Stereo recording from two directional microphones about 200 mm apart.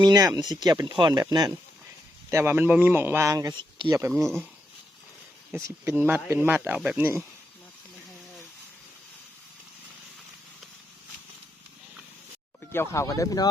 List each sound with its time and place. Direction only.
0.0 s a man's voice: 20° right (ahead or behind)
5.6 s a man's voice: 10° right (ahead or behind)
12.7 s speech: 15° left (ahead or behind)